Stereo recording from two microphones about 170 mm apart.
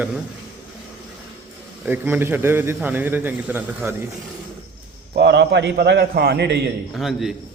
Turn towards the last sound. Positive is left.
turn(degrees=0)  # may be behind; listen again after turning